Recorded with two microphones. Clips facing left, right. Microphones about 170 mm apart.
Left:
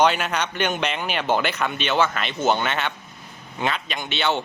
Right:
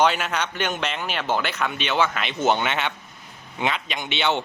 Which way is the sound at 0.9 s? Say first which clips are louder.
Left 2 dB; 10° left (ahead or behind).